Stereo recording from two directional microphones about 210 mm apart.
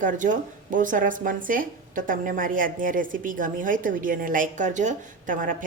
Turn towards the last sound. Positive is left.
turn(degrees=-40)  # may be behind; listen again after turning